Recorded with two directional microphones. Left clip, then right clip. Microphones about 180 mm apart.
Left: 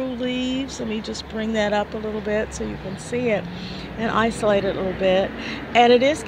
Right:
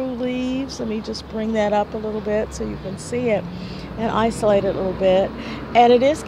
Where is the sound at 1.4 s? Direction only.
5° right (ahead or behind).